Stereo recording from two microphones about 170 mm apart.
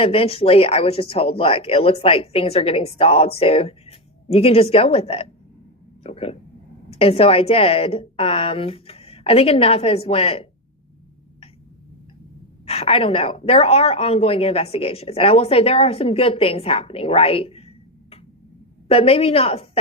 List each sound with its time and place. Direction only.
0.0 s speech: 35° left (ahead or behind)
6.0 s a sound: 35° left (ahead or behind)
6.9 s speech: 35° left (ahead or behind)
12.6 s speech: 35° left (ahead or behind)
18.9 s speech: 35° left (ahead or behind)